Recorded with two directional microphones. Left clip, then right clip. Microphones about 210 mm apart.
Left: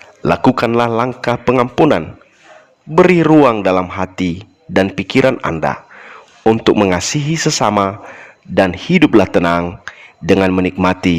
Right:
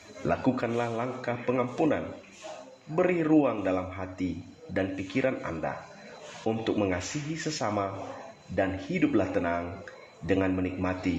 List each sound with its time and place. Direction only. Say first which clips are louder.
0.3 s a man's voice: left 15 dB; 45° left (ahead or behind)